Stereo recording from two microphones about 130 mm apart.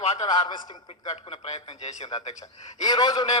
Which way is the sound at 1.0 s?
50° left (ahead or behind).